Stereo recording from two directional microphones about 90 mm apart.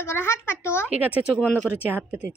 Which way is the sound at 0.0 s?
30° left (ahead or behind).